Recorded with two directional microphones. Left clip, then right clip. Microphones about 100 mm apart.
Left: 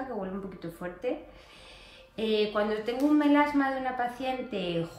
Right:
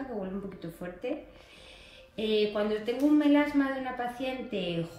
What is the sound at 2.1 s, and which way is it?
Speech, 30° left (ahead or behind).